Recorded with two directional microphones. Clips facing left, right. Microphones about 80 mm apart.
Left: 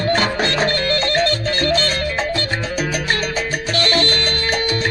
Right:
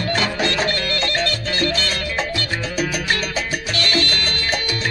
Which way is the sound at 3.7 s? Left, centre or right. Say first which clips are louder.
Left 4 dB; left.